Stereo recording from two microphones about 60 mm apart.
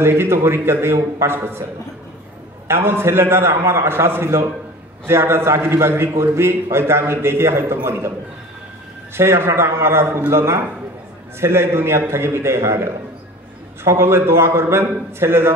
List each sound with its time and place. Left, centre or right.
0.0 s a man's voice: right
2.7 s a man's voice: right
9.1 s a man's voice: right